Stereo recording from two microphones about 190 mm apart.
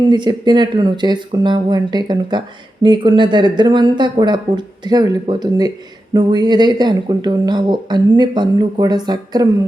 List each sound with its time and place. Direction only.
0.1 s speech: 25° right (ahead or behind)